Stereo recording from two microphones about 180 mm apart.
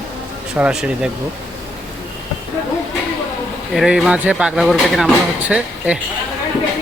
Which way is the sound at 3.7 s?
5° right (ahead or behind).